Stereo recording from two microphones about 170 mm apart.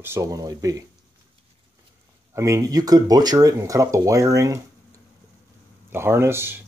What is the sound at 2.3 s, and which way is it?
Speech, 20° right (ahead or behind).